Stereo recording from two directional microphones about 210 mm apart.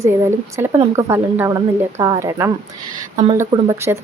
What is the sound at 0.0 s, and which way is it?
Speech, 15° right (ahead or behind).